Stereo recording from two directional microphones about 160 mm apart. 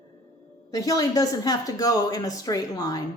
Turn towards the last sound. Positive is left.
turn(degrees=25)  # may be behind; listen again after turning